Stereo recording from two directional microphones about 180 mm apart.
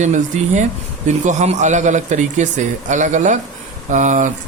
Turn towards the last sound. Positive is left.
turn(degrees=-45)  # may be behind; listen again after turning